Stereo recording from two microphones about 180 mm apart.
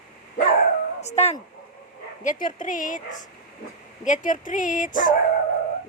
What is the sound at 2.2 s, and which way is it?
Speech, 45° left (ahead or behind).